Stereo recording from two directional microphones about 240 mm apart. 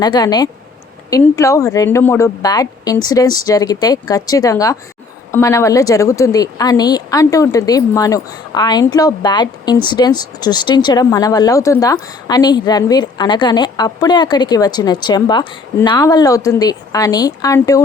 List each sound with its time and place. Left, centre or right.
0.0 s speech: centre